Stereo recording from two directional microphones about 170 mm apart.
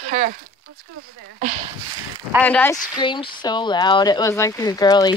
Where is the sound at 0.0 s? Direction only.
45° right (ahead or behind).